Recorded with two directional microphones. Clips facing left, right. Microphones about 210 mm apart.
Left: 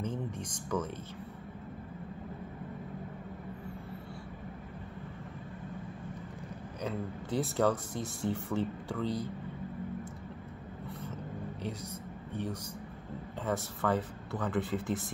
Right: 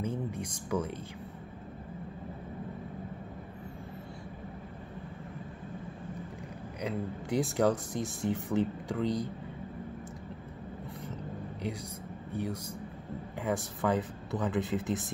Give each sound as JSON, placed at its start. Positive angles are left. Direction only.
{"t": 0.0, "sound": "a sound", "side_deg": -10}
{"t": 6.8, "sound": "speech", "side_deg": -15}
{"t": 12.3, "sound": "speech", "side_deg": -10}